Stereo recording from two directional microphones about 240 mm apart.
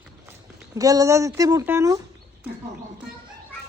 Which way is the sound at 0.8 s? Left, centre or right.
Centre.